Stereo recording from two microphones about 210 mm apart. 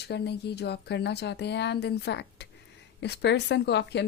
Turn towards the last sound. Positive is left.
turn(degrees=55)  # may be behind; listen again after turning